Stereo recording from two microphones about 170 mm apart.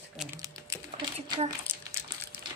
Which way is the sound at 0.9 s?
30° right (ahead or behind).